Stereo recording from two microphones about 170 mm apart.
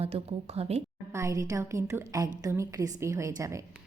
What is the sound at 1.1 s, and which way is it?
A woman's voice, 20° right (ahead or behind).